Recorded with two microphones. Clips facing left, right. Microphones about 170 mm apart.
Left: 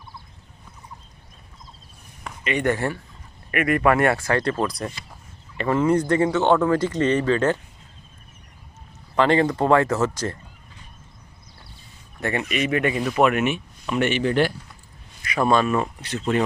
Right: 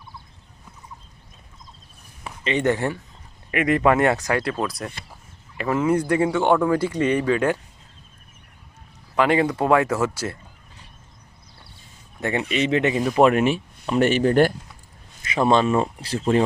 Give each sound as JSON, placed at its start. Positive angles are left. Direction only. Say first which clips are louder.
{"t": 2.4, "sound": "speech", "louder": "right 1 dB", "side_deg": -25}
{"t": 9.1, "sound": "speech", "louder": "left 1 dB", "side_deg": -10}
{"t": 12.2, "sound": "speech", "louder": "right 1 dB", "side_deg": -20}
{"t": 15.2, "sound": "speech", "louder": "right 1 dB", "side_deg": -25}